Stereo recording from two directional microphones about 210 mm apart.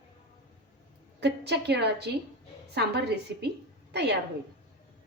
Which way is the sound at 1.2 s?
55° right (ahead or behind).